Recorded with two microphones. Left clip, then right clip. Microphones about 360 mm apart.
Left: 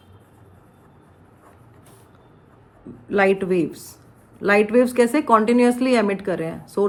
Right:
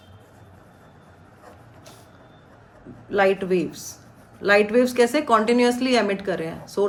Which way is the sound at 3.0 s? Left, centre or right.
Centre.